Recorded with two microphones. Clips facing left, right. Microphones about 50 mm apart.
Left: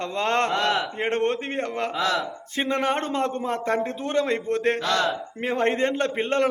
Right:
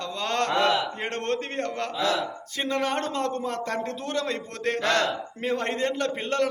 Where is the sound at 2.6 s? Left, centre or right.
Left.